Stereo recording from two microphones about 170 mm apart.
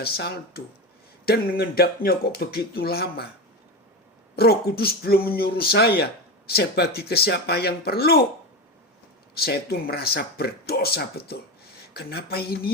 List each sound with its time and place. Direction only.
0.0 s speech: 65° left (ahead or behind)
4.4 s speech: 65° left (ahead or behind)
9.3 s speech: 65° left (ahead or behind)